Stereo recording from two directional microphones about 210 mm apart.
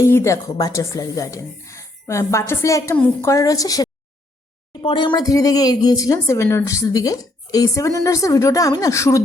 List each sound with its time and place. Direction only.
0.0 s a woman's voice: 15° left (ahead or behind)